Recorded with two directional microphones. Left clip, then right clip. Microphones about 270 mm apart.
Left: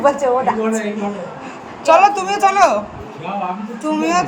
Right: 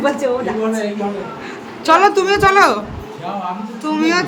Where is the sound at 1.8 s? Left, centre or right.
Centre.